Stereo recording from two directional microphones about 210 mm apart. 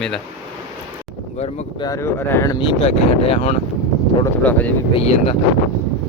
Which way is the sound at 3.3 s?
30° left (ahead or behind).